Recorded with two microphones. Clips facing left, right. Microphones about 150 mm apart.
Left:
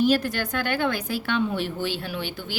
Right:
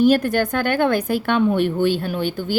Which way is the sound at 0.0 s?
50° right (ahead or behind).